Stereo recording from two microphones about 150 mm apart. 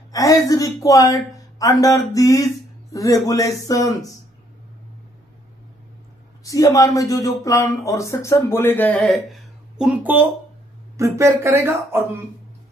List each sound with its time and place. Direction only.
0.1 s a woman's voice: 20° left (ahead or behind)
6.4 s speech: 20° left (ahead or behind)
9.8 s speech: 10° right (ahead or behind)